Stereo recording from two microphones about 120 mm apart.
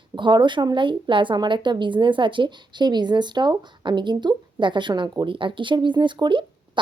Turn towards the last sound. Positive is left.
turn(degrees=-40)  # may be behind; listen again after turning